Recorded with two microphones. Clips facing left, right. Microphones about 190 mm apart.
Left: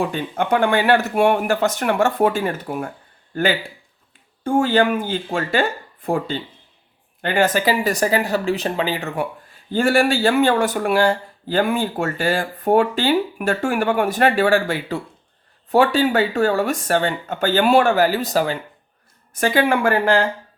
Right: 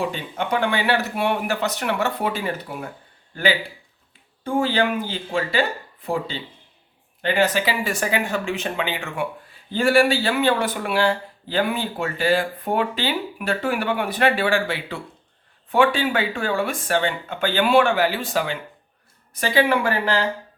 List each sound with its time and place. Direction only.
0.1 s speech: 50° left (ahead or behind)
4.4 s speech: 50° left (ahead or behind)
19.3 s speech: 50° left (ahead or behind)